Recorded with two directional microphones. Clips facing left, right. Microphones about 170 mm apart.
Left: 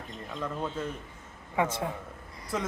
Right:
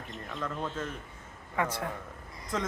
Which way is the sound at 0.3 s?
10° left (ahead or behind).